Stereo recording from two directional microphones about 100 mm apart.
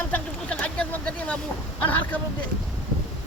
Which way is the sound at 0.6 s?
10° left (ahead or behind).